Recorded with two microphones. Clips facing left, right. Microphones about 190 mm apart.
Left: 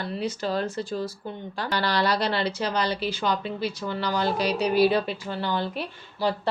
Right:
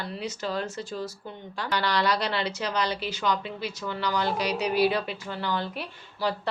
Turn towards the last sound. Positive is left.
turn(degrees=30)  # may be behind; listen again after turning